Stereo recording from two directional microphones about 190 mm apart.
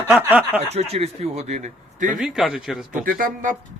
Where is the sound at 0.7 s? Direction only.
35° right (ahead or behind).